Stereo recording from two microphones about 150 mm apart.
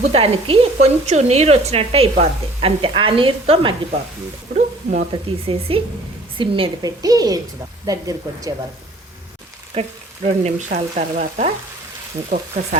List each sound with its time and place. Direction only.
0.1 s a woman's voice: 40° right (ahead or behind)
4.5 s a sound: 60° right (ahead or behind)
5.1 s a woman's voice: 40° right (ahead or behind)
7.0 s speech: 25° right (ahead or behind)
9.7 s a woman's voice: 40° right (ahead or behind)
10.4 s frying: 50° right (ahead or behind)